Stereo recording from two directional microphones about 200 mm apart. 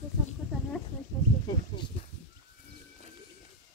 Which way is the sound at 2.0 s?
30° left (ahead or behind).